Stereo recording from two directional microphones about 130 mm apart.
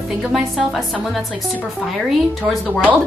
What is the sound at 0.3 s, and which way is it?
Speech, centre (ahead or behind).